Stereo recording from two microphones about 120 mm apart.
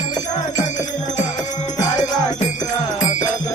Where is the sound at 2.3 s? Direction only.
90° left.